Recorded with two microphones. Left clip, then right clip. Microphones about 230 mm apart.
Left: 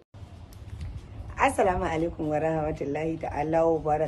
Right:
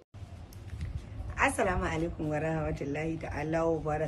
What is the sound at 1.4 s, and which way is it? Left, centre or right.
Speech, centre.